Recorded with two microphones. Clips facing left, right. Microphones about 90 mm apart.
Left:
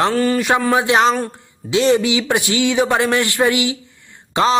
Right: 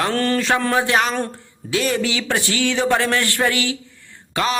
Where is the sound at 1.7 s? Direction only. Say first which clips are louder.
Left 6 dB; 20° left (ahead or behind).